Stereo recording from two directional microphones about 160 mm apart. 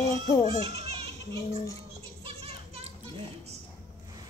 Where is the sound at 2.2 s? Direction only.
40° right (ahead or behind).